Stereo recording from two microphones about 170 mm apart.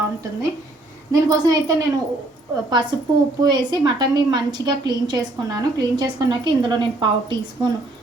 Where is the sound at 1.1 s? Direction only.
20° right (ahead or behind).